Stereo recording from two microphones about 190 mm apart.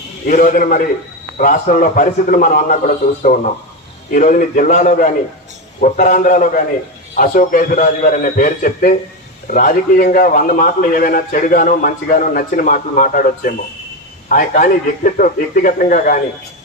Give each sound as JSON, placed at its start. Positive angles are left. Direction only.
{"t": 0.3, "sound": "a man's voice", "side_deg": 45}